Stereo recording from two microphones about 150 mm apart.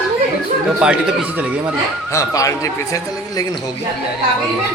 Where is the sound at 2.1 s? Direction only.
20° left (ahead or behind).